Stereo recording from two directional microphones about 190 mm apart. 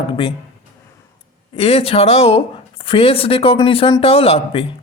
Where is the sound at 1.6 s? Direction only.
30° left (ahead or behind).